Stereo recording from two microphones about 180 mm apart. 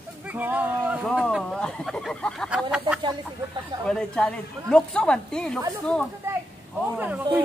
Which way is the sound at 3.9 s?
5° left (ahead or behind).